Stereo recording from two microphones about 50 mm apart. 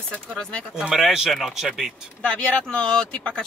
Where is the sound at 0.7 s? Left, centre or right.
Centre.